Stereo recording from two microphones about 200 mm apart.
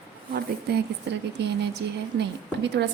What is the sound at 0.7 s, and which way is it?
A woman's voice, 55° right (ahead or behind).